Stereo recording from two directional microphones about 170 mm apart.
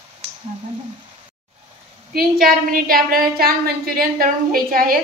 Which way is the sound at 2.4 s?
60° right (ahead or behind).